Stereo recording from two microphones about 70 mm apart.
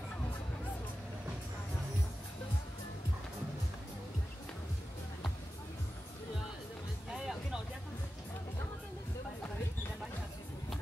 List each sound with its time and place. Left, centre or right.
7.1 s music: centre